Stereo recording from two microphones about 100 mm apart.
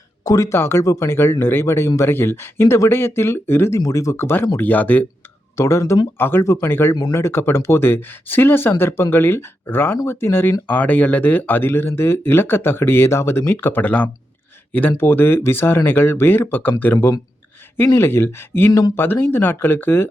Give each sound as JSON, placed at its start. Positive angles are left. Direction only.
{"t": 0.3, "sound": "speech", "side_deg": 30}
{"t": 3.8, "sound": "speech", "side_deg": 35}
{"t": 4.5, "sound": "speech", "side_deg": 15}
{"t": 5.5, "sound": "speech", "side_deg": 30}